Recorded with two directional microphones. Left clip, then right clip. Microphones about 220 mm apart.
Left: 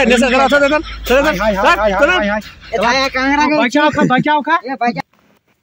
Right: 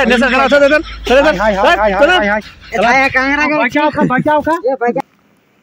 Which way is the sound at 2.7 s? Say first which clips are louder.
Right 4 dB; 25° left (ahead or behind).